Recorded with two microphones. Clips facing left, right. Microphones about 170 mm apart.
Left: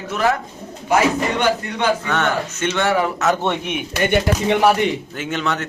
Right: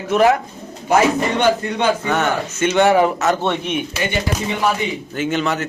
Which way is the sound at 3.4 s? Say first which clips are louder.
Right 1 dB; 15° left (ahead or behind).